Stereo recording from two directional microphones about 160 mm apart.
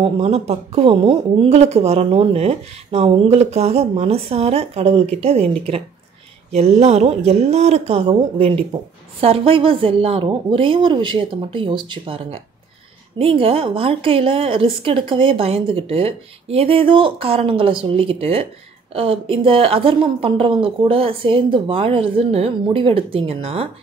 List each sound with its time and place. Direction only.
0.0 s speech: 40° right (ahead or behind)
6.5 s speech: 45° right (ahead or behind)
9.2 s speech: 35° right (ahead or behind)